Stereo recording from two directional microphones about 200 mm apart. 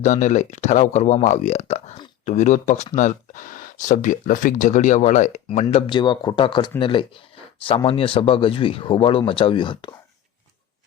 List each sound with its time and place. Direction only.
0.0 s speech: 35° left (ahead or behind)